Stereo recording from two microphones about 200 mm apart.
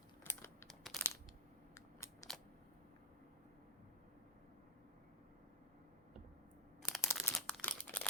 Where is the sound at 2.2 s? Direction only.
15° left (ahead or behind).